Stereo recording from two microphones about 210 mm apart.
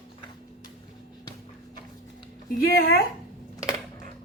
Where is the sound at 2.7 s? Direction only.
45° left (ahead or behind).